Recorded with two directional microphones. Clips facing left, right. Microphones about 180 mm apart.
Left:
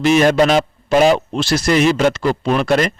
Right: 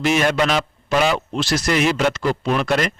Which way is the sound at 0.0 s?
35° left (ahead or behind).